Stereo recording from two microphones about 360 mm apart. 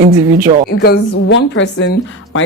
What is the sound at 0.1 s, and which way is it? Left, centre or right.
Speech, centre.